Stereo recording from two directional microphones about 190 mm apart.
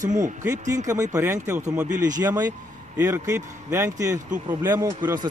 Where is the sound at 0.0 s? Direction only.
40° right (ahead or behind).